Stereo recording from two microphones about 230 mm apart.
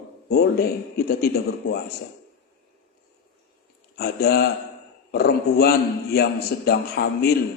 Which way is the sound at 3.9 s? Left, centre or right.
Left.